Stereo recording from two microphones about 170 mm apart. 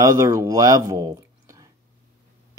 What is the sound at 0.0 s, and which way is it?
Speech, 20° right (ahead or behind).